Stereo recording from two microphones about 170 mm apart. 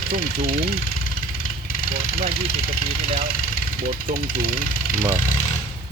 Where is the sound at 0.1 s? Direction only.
65° right (ahead or behind).